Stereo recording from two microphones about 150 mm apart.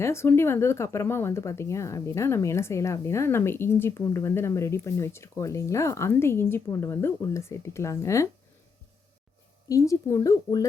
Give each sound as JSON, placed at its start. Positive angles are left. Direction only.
{"t": 0.0, "sound": "speech", "side_deg": 15}
{"t": 9.6, "sound": "speech", "side_deg": 20}